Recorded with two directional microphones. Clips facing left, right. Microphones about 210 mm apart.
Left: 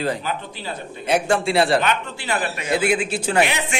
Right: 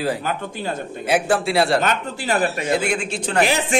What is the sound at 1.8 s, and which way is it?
Speech, 40° right (ahead or behind).